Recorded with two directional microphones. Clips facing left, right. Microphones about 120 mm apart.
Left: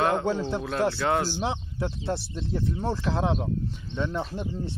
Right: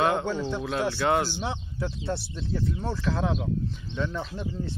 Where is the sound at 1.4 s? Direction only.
25° left (ahead or behind).